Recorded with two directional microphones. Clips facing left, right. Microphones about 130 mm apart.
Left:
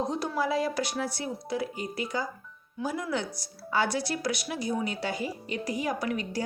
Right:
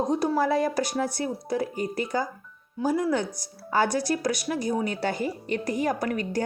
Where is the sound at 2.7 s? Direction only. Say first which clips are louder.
Right 6 dB; 35° right (ahead or behind).